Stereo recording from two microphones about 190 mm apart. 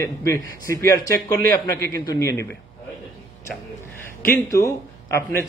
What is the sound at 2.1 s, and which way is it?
Speech, 15° left (ahead or behind).